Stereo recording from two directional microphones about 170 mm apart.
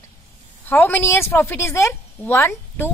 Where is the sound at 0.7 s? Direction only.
10° left (ahead or behind).